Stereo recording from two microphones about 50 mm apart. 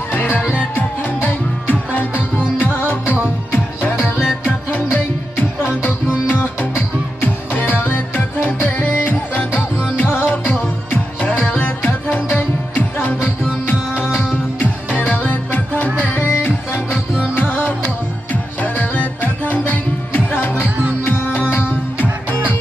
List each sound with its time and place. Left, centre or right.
0.1 s music: left
4.9 s music: left